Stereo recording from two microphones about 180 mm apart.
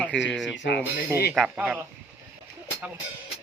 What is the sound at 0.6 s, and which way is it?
Dishes, 75° left (ahead or behind).